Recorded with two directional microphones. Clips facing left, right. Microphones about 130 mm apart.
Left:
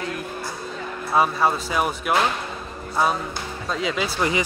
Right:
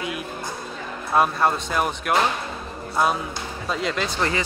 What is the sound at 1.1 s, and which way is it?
Speech, centre (ahead or behind).